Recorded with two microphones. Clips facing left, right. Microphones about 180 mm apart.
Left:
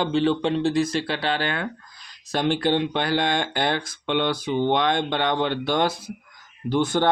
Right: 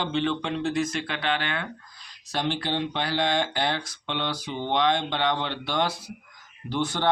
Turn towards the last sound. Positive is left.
turn(degrees=50)  # may be behind; listen again after turning